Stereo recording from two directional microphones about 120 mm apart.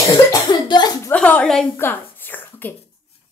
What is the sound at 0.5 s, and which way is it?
Cough, 35° left (ahead or behind).